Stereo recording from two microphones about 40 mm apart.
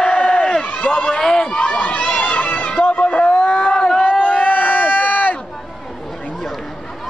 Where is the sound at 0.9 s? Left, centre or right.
Left.